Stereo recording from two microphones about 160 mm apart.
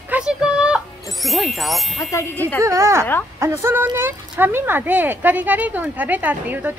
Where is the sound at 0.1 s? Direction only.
5° right (ahead or behind).